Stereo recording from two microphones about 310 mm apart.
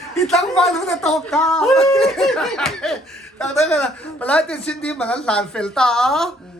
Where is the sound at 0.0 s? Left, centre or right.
Centre.